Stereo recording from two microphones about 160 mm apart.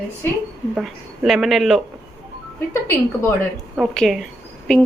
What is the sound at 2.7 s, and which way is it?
Speech, 15° left (ahead or behind).